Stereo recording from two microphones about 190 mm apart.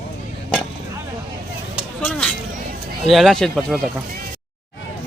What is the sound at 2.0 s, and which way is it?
Music, 5° left (ahead or behind).